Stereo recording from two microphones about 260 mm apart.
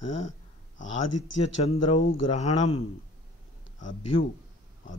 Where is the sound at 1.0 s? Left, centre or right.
Left.